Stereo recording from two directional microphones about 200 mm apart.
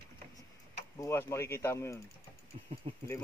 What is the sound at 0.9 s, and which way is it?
Speech, 15° left (ahead or behind).